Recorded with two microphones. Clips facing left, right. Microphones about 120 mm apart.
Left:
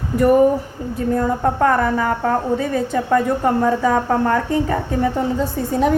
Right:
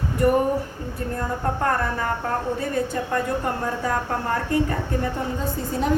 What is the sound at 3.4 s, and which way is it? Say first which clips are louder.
Speech: left 9 dB; 90° left.